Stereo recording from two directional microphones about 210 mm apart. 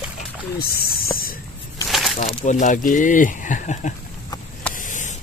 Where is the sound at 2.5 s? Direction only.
35° left (ahead or behind).